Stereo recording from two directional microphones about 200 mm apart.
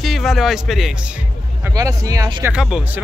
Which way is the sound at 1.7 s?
15° right (ahead or behind).